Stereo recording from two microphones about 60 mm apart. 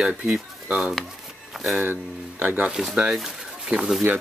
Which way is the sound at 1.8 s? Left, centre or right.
Right.